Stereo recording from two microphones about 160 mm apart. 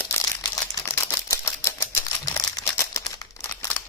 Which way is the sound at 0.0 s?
15° left (ahead or behind).